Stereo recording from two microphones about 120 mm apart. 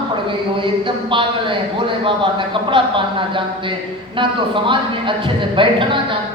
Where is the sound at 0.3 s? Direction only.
45° right (ahead or behind).